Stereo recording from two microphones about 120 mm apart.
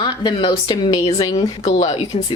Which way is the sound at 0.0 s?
40° left (ahead or behind).